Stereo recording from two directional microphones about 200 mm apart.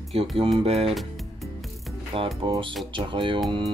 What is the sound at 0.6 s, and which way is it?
Music, 30° right (ahead or behind).